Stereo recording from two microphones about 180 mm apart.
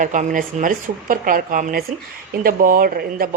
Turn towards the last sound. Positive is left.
turn(degrees=-55)  # may be behind; listen again after turning